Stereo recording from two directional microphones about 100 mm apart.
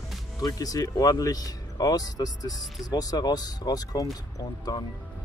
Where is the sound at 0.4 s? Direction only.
40° left (ahead or behind).